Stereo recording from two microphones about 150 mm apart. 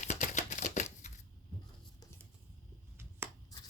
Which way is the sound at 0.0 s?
50° left (ahead or behind).